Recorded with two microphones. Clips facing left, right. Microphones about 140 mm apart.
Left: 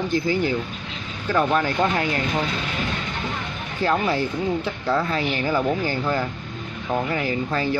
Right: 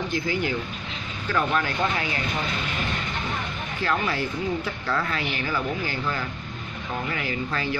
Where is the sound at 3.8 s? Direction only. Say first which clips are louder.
Left 5 dB; 25° left (ahead or behind).